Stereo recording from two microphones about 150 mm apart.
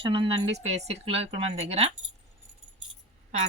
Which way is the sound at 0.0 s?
35° right (ahead or behind).